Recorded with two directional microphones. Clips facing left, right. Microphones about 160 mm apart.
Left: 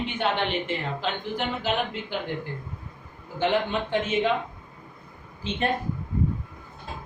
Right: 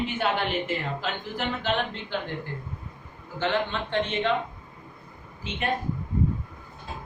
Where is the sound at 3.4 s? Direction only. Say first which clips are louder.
Left 3 dB; 15° left (ahead or behind).